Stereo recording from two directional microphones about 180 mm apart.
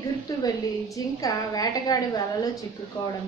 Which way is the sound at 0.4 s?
20° left (ahead or behind).